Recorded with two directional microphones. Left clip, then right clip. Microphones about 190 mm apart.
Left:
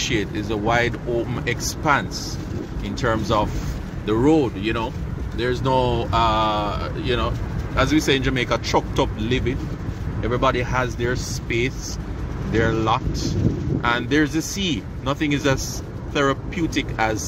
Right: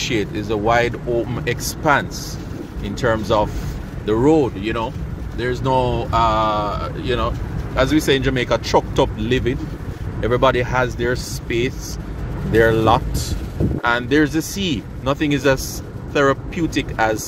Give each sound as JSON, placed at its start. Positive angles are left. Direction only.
{"t": 0.0, "sound": "speech", "side_deg": -15}